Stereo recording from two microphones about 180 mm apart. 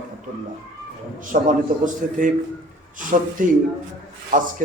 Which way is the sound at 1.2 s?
50° right (ahead or behind).